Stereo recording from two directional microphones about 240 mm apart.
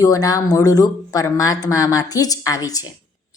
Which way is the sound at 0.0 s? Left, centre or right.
Centre.